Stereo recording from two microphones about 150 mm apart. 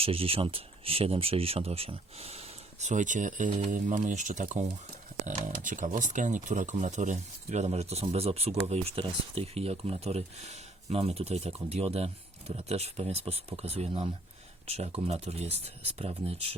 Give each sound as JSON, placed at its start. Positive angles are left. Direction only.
{"t": 0.0, "sound": "speech", "side_deg": -40}